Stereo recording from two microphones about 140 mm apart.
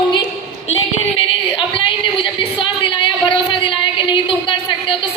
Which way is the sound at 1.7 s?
35° left (ahead or behind).